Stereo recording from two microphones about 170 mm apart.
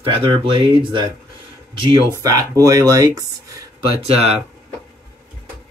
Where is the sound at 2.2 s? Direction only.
20° right (ahead or behind).